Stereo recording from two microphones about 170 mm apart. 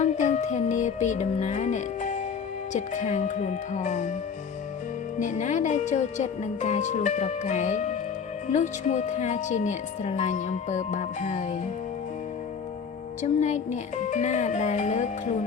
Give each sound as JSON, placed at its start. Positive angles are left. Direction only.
{"t": 0.0, "sound": "music", "side_deg": 45}
{"t": 2.7, "sound": "a woman's voice", "side_deg": 45}
{"t": 5.2, "sound": "a woman's voice", "side_deg": 45}
{"t": 13.2, "sound": "a woman's voice", "side_deg": 45}